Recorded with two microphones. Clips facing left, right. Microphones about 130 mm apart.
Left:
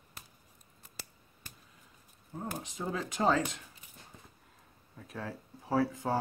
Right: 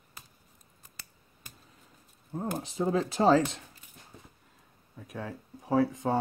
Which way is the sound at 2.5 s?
35° right (ahead or behind).